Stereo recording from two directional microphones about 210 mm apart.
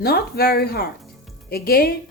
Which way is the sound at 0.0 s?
45° left (ahead or behind).